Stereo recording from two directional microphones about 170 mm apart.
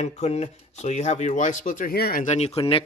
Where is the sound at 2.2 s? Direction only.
40° left (ahead or behind).